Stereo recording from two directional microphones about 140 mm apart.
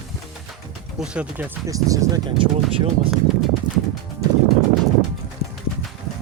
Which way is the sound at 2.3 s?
40° right (ahead or behind).